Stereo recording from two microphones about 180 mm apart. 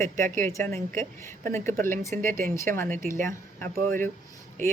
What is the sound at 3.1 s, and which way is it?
Speech, 45° right (ahead or behind).